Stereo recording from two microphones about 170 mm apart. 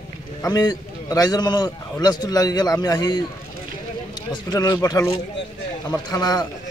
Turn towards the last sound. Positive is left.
turn(degrees=25)  # may be behind; listen again after turning